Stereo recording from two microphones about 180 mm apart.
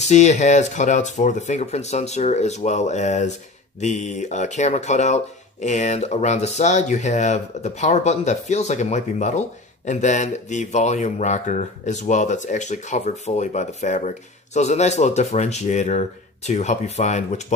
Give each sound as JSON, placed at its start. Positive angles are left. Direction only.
{"t": 0.0, "sound": "speech", "side_deg": 40}